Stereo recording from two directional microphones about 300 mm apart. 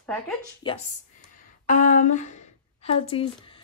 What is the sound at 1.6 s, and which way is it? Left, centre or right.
A woman's voice, left.